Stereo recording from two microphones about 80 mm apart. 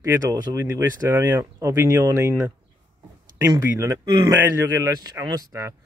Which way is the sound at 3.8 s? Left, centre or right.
Right.